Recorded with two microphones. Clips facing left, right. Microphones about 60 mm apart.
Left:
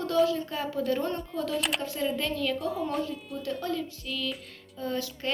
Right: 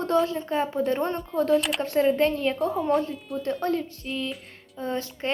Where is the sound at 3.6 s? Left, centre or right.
Right.